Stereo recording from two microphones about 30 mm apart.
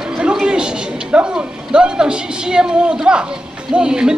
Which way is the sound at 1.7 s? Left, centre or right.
Right.